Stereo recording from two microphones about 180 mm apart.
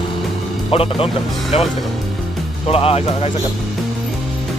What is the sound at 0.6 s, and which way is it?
Speech, 30° left (ahead or behind).